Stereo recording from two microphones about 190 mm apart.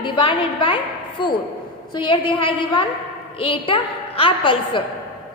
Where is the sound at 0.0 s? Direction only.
25° left (ahead or behind).